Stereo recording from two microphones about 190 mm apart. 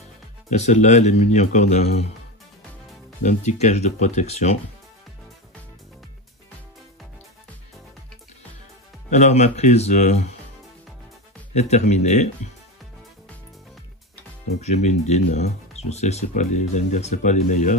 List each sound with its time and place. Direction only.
0.5 s speech: 35° left (ahead or behind)
3.2 s speech: 40° left (ahead or behind)
9.1 s speech: 35° left (ahead or behind)
11.5 s speech: 35° left (ahead or behind)
14.6 s speech: 35° left (ahead or behind)